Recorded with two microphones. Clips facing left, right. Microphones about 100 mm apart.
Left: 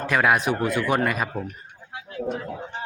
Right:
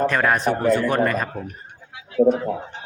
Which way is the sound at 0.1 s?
5° left (ahead or behind).